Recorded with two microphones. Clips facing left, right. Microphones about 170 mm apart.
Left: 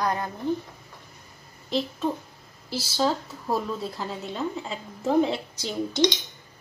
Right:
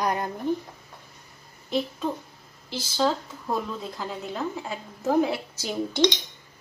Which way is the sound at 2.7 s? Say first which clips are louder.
Even; 5° left (ahead or behind).